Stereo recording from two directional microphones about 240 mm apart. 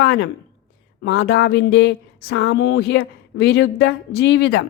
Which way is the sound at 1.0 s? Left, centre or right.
Left.